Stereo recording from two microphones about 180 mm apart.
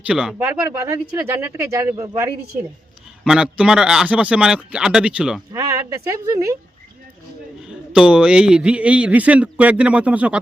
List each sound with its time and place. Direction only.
0.0 s a man's voice: 5° right (ahead or behind)
5.5 s speech: 20° right (ahead or behind)
7.6 s a man's voice: 5° right (ahead or behind)